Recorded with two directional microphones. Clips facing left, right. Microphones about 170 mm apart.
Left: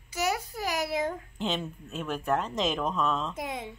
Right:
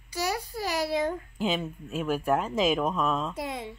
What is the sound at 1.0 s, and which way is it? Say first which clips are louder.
A woman's voice: right 2 dB; centre (ahead or behind).